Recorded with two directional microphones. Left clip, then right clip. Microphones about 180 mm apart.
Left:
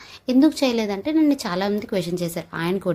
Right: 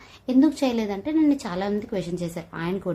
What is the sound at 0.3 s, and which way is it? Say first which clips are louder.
A woman's voice: left 3 dB; 30° left (ahead or behind).